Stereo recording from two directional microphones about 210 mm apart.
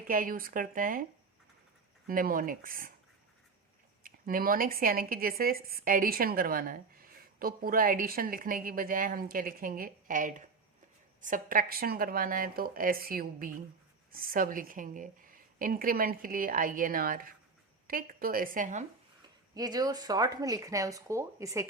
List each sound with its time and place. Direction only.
0.1 s speech: 40° right (ahead or behind)
2.0 s speech: 40° right (ahead or behind)
4.0 s speech: 40° right (ahead or behind)
19.5 s speech: 20° right (ahead or behind)